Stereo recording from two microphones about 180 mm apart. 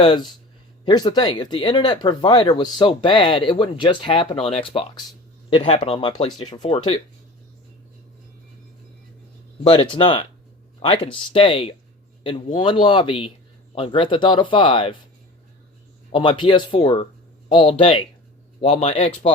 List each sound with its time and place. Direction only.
0.0 s speech: 25° left (ahead or behind)
9.6 s speech: 25° left (ahead or behind)
16.1 s speech: 25° left (ahead or behind)